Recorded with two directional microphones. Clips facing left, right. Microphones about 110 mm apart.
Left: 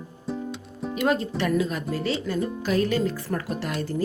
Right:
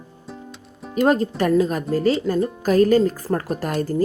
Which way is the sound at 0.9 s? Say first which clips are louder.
Right 6 dB; 40° right (ahead or behind).